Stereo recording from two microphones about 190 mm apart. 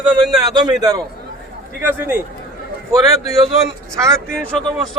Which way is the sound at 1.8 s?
10° right (ahead or behind).